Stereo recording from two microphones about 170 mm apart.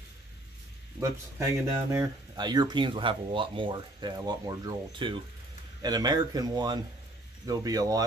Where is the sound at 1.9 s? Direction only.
20° right (ahead or behind).